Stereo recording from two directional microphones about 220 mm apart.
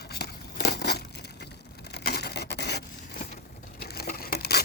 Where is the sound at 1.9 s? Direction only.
45° left (ahead or behind).